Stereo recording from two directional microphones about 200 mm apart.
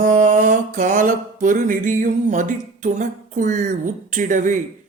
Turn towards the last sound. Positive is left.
turn(degrees=-40)  # may be behind; listen again after turning